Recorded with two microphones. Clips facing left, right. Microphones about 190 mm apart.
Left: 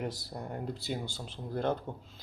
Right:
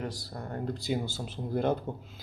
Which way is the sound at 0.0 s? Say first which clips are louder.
Even; 20° left (ahead or behind).